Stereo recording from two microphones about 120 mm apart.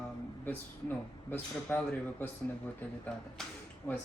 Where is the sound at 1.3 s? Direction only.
15° left (ahead or behind).